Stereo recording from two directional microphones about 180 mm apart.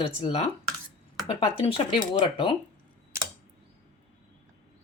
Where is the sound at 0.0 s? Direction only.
30° left (ahead or behind).